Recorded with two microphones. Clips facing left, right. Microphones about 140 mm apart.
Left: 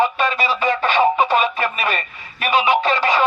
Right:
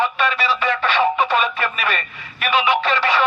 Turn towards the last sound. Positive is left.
turn(degrees=40)  # may be behind; listen again after turning